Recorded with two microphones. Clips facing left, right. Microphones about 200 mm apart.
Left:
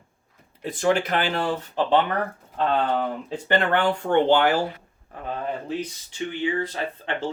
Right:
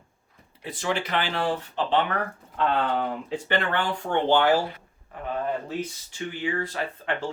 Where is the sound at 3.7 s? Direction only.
55° left (ahead or behind).